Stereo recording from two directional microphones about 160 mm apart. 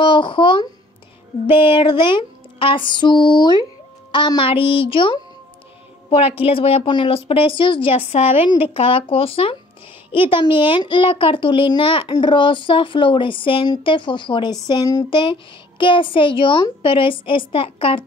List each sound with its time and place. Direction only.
0.0 s a child's voice: 30° left (ahead or behind)
2.9 s a sound: 30° left (ahead or behind)
4.1 s a child's voice: 30° left (ahead or behind)